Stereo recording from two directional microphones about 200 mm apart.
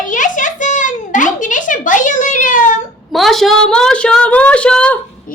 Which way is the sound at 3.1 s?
Centre (ahead or behind).